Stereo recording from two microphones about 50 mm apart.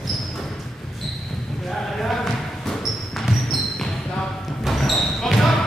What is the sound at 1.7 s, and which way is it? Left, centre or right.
Basketball bounce, centre.